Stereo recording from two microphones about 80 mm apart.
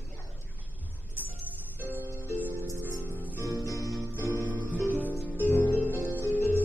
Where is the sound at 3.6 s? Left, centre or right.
Left.